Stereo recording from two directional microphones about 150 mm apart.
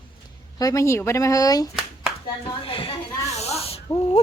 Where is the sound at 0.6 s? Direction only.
20° left (ahead or behind).